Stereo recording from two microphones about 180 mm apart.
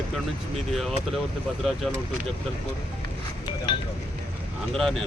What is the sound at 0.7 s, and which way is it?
Speech, centre (ahead or behind).